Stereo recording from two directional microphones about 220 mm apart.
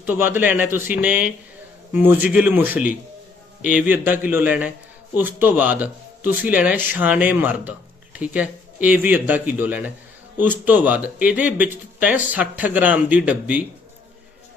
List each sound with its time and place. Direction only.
0.0 s speech: 10° right (ahead or behind)